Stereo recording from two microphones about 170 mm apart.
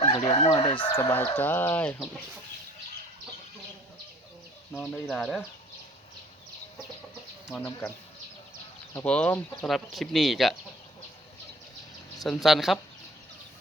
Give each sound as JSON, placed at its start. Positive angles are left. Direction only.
{"t": 0.0, "sound": "chicken", "side_deg": 35}
{"t": 0.4, "sound": "speech", "side_deg": 25}
{"t": 0.9, "sound": "speech", "side_deg": 15}
{"t": 4.7, "sound": "speech", "side_deg": 0}
{"t": 7.5, "sound": "speech", "side_deg": 10}
{"t": 9.0, "sound": "speech", "side_deg": 5}
{"t": 12.2, "sound": "speech", "side_deg": 0}